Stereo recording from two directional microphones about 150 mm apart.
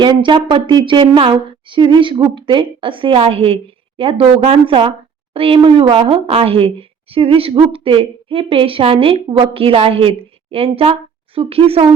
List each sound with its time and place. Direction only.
0.0 s a woman's voice: 30° right (ahead or behind)